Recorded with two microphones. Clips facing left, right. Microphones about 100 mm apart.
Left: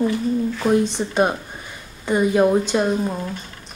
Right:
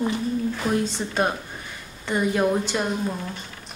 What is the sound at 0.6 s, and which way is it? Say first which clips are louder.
Speech: left 9 dB; 20° left (ahead or behind).